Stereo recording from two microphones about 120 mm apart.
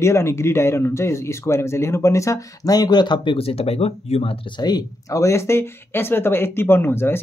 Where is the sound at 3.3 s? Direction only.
55° left (ahead or behind).